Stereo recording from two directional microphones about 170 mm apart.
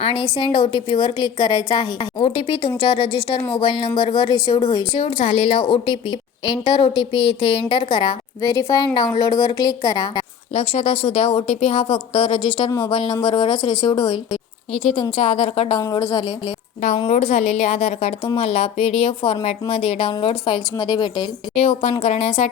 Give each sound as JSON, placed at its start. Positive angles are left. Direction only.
{"t": 0.0, "sound": "a woman's voice", "side_deg": 30}
{"t": 10.5, "sound": "a woman's voice", "side_deg": 35}
{"t": 15.8, "sound": "a woman's voice", "side_deg": 20}
{"t": 17.1, "sound": "speech", "side_deg": 40}
{"t": 21.5, "sound": "speech", "side_deg": 35}